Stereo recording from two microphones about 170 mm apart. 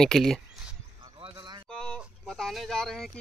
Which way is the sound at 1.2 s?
25° right (ahead or behind).